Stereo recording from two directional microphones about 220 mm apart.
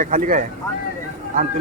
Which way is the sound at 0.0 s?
35° right (ahead or behind).